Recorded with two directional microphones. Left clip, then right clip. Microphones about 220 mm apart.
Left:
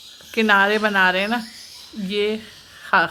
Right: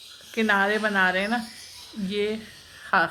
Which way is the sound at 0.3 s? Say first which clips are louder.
Left 6 dB; 25° left (ahead or behind).